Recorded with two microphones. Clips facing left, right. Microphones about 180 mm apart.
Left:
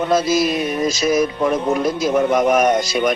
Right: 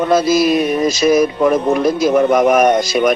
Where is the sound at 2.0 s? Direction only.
75° right (ahead or behind).